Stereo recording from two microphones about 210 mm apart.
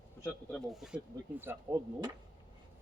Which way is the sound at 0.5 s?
Centre (ahead or behind).